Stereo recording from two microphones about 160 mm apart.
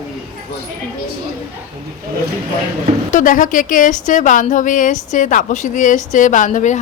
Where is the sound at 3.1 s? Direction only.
55° left (ahead or behind).